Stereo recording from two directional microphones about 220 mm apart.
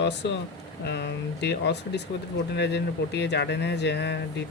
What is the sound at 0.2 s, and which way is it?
Speech, 50° left (ahead or behind).